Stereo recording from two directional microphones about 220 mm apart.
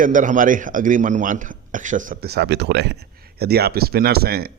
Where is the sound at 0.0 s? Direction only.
35° right (ahead or behind).